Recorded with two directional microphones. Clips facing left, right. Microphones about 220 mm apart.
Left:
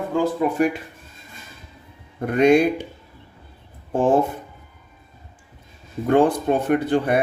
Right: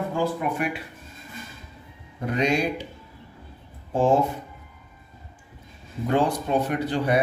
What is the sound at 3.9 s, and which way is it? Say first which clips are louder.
Speech: left 2 dB; 55° left (ahead or behind).